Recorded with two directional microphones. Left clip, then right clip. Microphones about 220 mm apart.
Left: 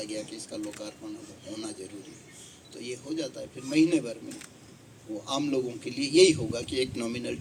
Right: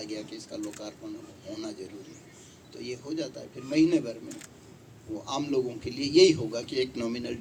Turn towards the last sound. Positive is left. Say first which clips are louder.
# even
turn(degrees=50)  # may be behind; listen again after turning